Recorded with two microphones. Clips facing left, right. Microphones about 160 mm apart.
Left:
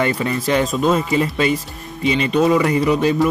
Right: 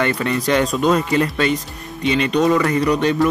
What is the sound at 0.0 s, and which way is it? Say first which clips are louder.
Speech: even; 5° left (ahead or behind).